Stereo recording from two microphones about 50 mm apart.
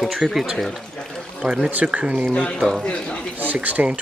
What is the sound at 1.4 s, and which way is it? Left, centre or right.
Speech, centre.